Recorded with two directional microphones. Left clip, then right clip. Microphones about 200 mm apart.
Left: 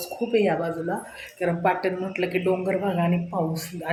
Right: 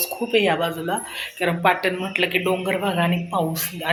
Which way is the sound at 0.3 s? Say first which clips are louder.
Right 3 dB; centre (ahead or behind).